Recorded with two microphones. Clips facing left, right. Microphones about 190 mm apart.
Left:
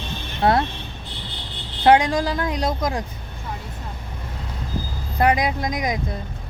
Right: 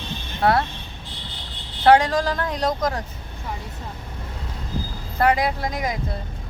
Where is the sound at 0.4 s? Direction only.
25° left (ahead or behind).